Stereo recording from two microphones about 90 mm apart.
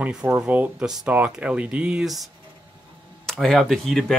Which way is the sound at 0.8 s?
5° right (ahead or behind).